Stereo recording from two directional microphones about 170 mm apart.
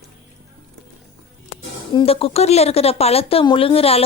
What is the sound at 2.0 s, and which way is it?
Speech, 35° left (ahead or behind).